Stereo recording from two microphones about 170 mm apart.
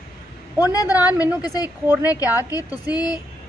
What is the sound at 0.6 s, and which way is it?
A woman's voice, 20° left (ahead or behind).